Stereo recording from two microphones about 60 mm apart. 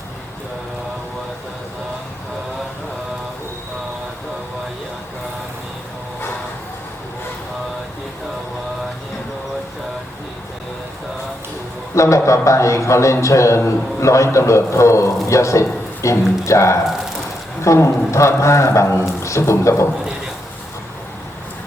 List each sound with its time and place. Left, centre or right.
11.9 s a man's voice: left